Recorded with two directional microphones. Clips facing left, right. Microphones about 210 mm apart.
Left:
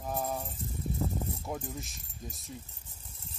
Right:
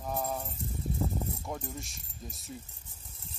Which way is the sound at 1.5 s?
Centre (ahead or behind).